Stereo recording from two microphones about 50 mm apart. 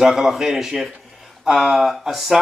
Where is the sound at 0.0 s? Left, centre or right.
Centre.